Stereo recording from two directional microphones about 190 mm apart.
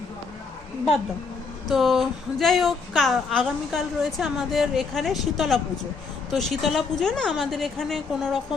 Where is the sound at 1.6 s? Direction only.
Centre (ahead or behind).